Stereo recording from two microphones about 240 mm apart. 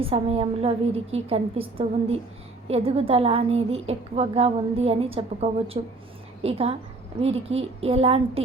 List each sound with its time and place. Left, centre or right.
0.0 s a woman's voice: right